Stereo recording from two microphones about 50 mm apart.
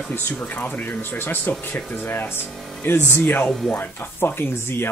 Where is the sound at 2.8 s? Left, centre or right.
Left.